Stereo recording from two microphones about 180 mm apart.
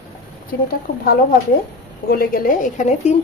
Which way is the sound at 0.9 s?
55° left (ahead or behind).